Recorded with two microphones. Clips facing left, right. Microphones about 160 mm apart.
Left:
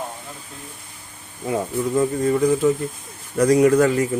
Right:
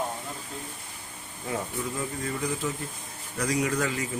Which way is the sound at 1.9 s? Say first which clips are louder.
Left 17 dB; 55° left (ahead or behind).